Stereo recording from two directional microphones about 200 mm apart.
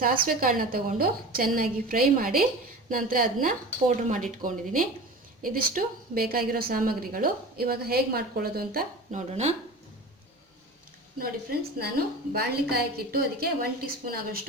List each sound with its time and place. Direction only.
0.3 s a woman's voice: 45° right (ahead or behind)
9.3 s speech: 30° right (ahead or behind)
11.2 s a woman's voice: 50° right (ahead or behind)